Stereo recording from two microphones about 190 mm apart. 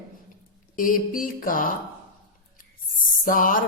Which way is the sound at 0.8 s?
45° left (ahead or behind).